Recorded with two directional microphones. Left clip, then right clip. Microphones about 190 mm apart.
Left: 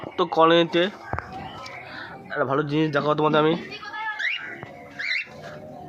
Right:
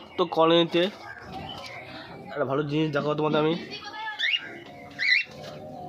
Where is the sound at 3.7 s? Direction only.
75° right (ahead or behind).